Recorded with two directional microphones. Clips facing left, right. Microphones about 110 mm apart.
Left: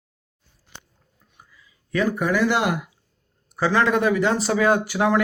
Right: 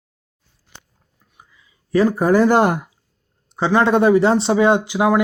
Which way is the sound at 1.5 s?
25° right (ahead or behind).